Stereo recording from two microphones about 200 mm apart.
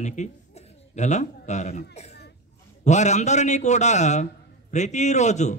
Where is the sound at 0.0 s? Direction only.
35° left (ahead or behind).